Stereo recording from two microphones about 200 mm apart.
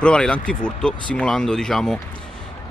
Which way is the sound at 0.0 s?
5° left (ahead or behind).